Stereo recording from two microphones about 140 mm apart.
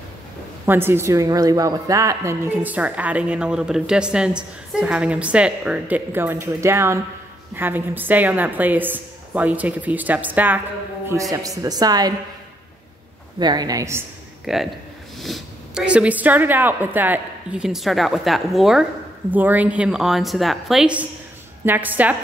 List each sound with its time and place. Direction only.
0.7 s a woman's voice: 15° right (ahead or behind)
11.1 s a woman's voice: 20° right (ahead or behind)
13.4 s a woman's voice: 30° right (ahead or behind)
14.4 s a man's voice: centre (ahead or behind)